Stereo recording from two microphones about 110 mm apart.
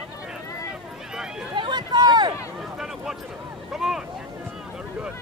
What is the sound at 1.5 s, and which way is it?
Run, 45° right (ahead or behind).